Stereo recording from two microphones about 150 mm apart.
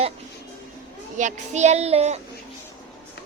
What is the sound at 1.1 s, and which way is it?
A child's voice, 55° right (ahead or behind).